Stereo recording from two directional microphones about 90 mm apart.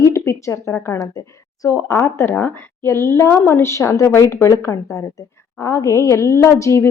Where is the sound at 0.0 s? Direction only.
35° left (ahead or behind).